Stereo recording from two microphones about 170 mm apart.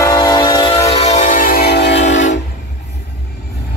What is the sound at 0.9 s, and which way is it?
Train, 40° left (ahead or behind).